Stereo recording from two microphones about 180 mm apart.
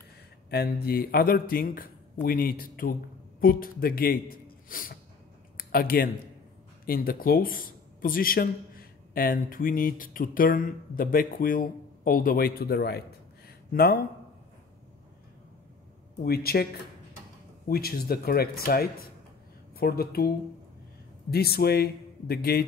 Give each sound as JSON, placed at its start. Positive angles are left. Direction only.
{"t": 0.5, "sound": "speech", "side_deg": 60}
{"t": 5.6, "sound": "a sound", "side_deg": 55}
{"t": 6.9, "sound": "speech", "side_deg": 55}
{"t": 16.3, "sound": "speech", "side_deg": 60}
{"t": 17.6, "sound": "speech", "side_deg": 55}